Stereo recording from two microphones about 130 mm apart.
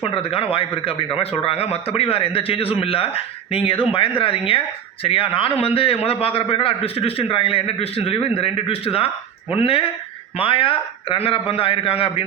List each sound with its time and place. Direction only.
0.0 s a man's voice: 45° left (ahead or behind)